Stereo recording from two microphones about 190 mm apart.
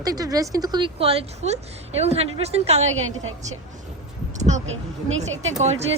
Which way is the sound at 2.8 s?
90° right.